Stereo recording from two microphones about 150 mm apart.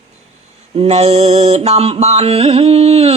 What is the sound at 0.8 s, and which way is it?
Mantra, 45° right (ahead or behind).